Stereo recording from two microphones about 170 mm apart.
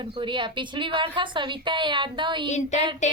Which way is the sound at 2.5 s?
45° left (ahead or behind).